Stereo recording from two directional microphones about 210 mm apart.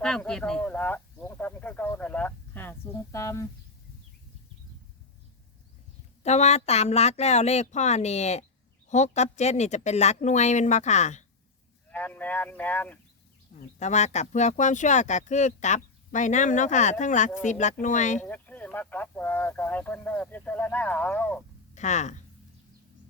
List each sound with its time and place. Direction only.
0.0 s speech: 5° left (ahead or behind)
6.2 s speech: 30° left (ahead or behind)
11.9 s speech: 5° left (ahead or behind)
13.7 s speech: 35° left (ahead or behind)
18.3 s speech: 10° left (ahead or behind)
21.8 s speech: 35° left (ahead or behind)